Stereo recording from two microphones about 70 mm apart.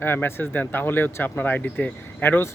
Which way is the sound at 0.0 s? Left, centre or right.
Left.